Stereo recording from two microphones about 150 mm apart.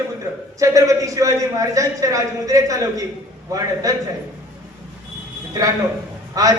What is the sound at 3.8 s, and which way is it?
Speech, 25° right (ahead or behind).